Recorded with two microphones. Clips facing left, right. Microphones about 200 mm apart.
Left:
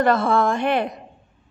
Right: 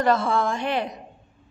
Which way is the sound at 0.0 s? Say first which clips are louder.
Left 3 dB; 55° left (ahead or behind).